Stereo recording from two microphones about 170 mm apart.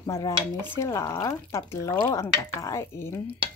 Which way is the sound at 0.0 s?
20° left (ahead or behind).